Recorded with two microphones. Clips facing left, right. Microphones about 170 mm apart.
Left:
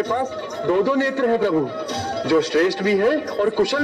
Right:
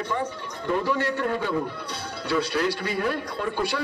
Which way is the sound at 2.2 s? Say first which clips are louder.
Left 7 dB; 75° left (ahead or behind).